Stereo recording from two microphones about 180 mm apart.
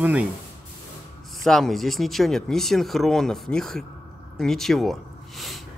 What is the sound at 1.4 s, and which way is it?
Speech, centre (ahead or behind).